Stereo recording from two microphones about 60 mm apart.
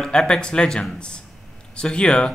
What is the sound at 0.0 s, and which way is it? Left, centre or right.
A man's voice, centre.